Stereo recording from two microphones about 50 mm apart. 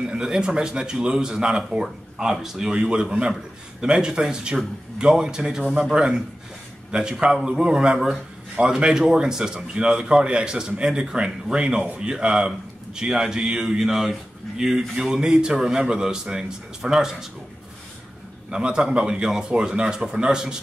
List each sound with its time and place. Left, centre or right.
0.0 s speech: centre
18.5 s speech: centre